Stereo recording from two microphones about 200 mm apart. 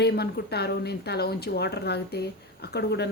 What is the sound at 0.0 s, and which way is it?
A woman's voice, 55° left (ahead or behind).